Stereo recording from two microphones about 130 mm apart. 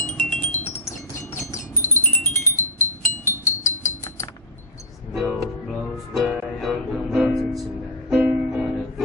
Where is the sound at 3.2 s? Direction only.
20° left (ahead or behind).